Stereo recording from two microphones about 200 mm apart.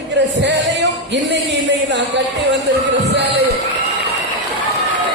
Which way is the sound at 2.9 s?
60° right (ahead or behind).